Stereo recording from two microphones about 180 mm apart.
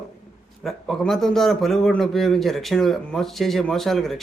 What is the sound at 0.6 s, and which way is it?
Speech, centre (ahead or behind).